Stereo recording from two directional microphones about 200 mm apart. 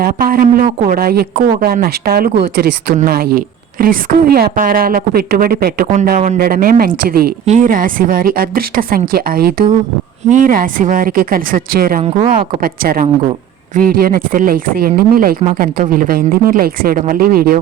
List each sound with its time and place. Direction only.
0.0 s a woman's voice: 45° right (ahead or behind)